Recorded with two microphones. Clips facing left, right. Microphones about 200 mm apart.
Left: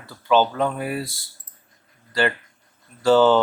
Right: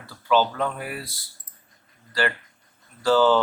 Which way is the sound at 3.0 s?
25° left (ahead or behind).